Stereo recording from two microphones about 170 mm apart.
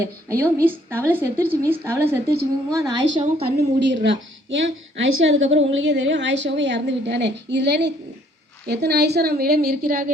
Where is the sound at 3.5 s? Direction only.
80° right.